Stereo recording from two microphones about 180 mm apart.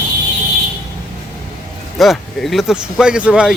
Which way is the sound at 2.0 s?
Centre (ahead or behind).